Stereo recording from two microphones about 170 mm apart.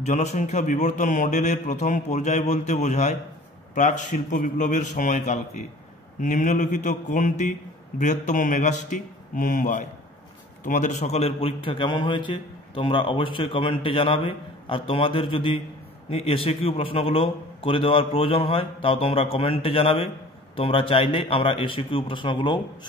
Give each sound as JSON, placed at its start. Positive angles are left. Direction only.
{"t": 0.0, "sound": "a man's voice", "side_deg": 40}